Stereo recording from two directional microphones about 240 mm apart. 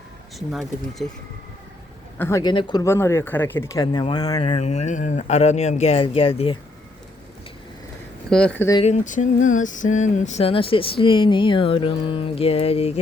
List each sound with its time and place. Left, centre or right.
1.0 s speech: centre; by 6.6 s left
8.3 s speech: centre
8.8 s speech: left